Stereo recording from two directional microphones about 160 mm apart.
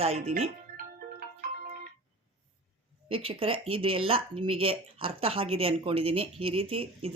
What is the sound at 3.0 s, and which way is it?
Speech, 35° right (ahead or behind).